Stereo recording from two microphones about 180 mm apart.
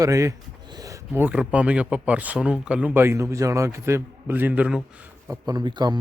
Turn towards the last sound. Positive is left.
turn(degrees=-20)  # may be behind; listen again after turning